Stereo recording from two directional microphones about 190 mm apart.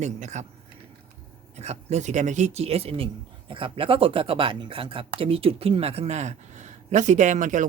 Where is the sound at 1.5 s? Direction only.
35° right (ahead or behind).